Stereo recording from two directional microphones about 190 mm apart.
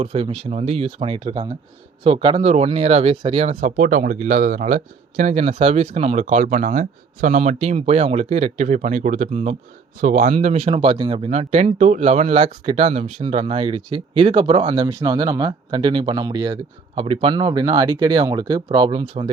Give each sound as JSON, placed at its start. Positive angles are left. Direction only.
{"t": 0.0, "sound": "speech", "side_deg": -30}
{"t": 14.8, "sound": "speech", "side_deg": -20}